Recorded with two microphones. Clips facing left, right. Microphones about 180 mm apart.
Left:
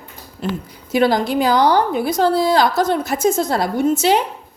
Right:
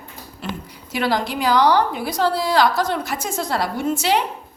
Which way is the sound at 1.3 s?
50° left (ahead or behind).